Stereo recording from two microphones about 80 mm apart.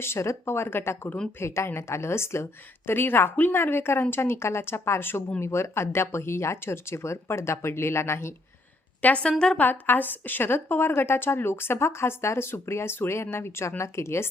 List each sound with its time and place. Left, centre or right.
0.0 s a woman's voice: left
9.0 s a woman's voice: centre
9.6 s a woman's voice: left